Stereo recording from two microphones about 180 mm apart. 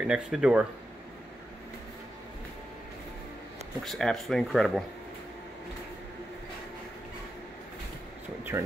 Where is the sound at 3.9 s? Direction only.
Centre (ahead or behind).